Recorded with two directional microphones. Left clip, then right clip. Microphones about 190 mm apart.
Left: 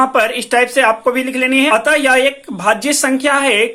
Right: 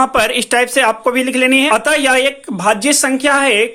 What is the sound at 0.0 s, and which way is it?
Speech, 25° right (ahead or behind).